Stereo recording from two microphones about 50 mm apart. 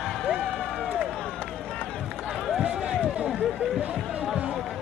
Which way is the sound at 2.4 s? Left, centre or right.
Centre.